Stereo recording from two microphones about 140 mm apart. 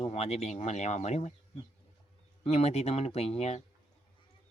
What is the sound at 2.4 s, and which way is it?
Speech, 50° left (ahead or behind).